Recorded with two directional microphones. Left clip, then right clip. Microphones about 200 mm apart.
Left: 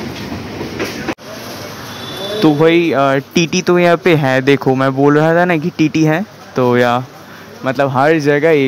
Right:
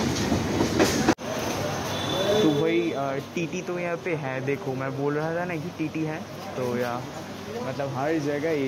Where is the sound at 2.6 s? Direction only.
40° left (ahead or behind).